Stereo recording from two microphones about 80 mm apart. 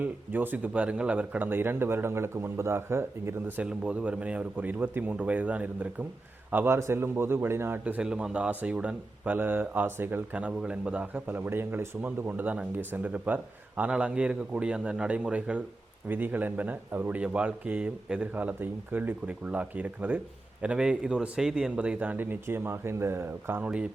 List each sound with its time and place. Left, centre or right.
0.0 s a man's voice: right
8.0 s a man's voice: centre; by 23.6 s right
23.6 s a man's voice: centre